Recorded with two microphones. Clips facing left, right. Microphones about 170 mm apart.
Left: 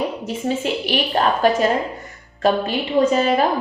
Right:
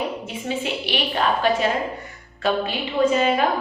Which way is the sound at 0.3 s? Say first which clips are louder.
Left 5 dB; 40° left (ahead or behind).